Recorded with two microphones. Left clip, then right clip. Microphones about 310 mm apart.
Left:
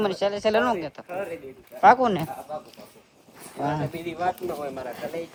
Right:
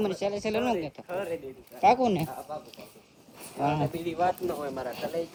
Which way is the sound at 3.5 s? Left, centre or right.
Centre.